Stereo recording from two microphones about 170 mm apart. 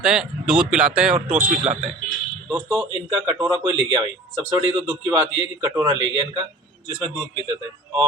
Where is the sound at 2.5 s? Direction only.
Centre (ahead or behind).